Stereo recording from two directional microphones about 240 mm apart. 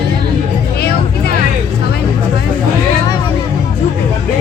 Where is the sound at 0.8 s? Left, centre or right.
Left.